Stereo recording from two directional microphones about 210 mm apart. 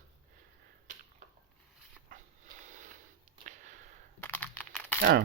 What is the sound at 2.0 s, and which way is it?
Sniff, 35° right (ahead or behind).